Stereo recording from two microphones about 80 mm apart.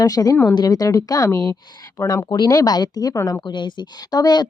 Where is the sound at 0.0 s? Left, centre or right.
Left.